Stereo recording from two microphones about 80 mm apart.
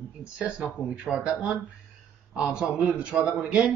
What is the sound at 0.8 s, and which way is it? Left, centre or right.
Speech, centre.